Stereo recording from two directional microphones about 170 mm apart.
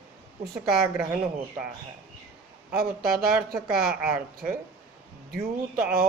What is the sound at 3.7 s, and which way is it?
Speech, 5° right (ahead or behind).